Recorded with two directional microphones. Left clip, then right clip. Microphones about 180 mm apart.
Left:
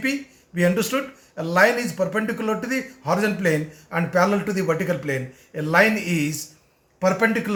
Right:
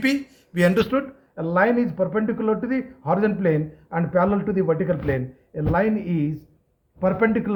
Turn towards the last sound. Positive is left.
turn(degrees=-40)  # may be behind; listen again after turning